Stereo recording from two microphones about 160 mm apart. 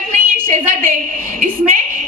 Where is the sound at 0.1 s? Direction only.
55° right (ahead or behind).